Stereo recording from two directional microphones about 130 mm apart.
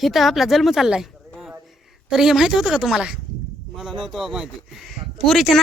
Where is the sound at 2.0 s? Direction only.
5° right (ahead or behind).